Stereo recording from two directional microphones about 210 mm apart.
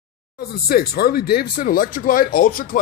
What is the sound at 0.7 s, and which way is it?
Speech, 45° left (ahead or behind).